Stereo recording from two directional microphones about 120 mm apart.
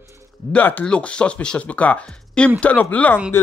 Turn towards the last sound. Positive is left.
turn(degrees=15)  # may be behind; listen again after turning